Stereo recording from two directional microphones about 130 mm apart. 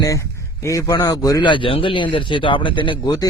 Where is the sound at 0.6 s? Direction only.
25° left (ahead or behind).